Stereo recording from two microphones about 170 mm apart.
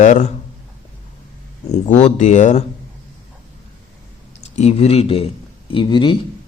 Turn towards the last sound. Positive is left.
turn(degrees=30)  # may be behind; listen again after turning